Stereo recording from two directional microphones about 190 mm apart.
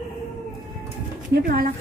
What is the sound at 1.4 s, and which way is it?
Speech, 50° right (ahead or behind).